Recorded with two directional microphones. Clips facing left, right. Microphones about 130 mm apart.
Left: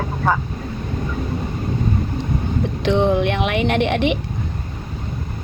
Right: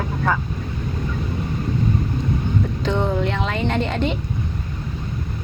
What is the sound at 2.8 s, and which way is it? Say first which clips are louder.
Speech: left 7 dB; 85° left.